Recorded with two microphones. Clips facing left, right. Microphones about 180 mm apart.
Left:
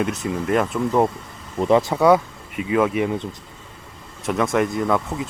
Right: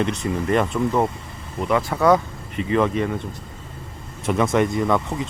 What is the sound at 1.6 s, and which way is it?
Speech, 30° left (ahead or behind).